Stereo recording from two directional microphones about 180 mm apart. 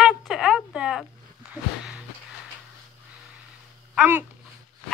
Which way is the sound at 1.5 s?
5° right (ahead or behind).